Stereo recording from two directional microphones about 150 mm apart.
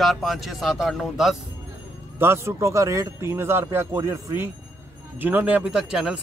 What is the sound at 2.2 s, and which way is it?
Speech, 15° right (ahead or behind).